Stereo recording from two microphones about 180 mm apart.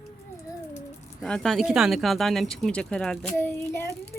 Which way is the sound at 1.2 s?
5° left (ahead or behind).